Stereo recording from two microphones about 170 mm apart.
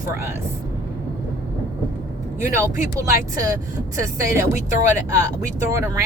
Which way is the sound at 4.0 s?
15° right (ahead or behind).